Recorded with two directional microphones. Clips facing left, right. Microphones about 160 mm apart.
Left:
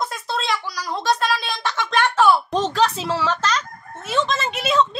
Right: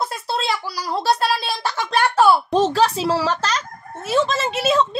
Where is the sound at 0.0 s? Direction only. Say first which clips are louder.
Right 2 dB; 30° right (ahead or behind).